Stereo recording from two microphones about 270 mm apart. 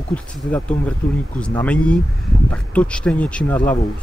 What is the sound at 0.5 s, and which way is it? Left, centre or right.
Speech, centre.